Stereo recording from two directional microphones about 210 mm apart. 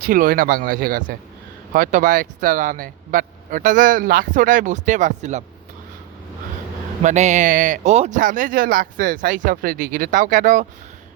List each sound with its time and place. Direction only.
0.0 s speech: 45° right (ahead or behind)
7.0 s speech: 35° right (ahead or behind)